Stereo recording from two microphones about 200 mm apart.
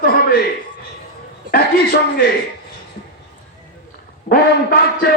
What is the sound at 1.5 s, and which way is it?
Speech, 50° left (ahead or behind).